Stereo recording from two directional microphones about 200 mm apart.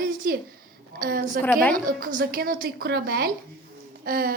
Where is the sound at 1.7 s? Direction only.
40° right (ahead or behind).